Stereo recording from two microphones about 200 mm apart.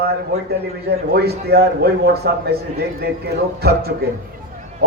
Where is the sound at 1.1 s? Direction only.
55° right (ahead or behind).